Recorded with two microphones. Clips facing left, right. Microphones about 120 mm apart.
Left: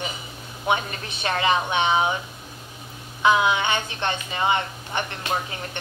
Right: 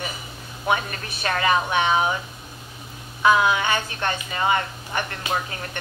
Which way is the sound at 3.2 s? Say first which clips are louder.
Right 1 dB; 20° left (ahead or behind).